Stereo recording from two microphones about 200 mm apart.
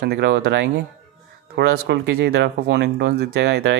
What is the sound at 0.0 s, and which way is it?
Speech, 55° right (ahead or behind).